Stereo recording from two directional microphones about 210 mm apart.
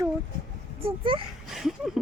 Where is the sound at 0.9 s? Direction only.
25° right (ahead or behind).